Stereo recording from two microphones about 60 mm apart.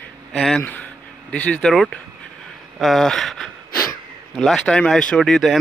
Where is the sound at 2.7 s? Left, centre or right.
Centre.